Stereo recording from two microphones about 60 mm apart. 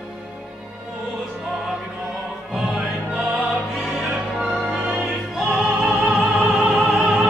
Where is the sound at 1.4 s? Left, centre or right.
Centre.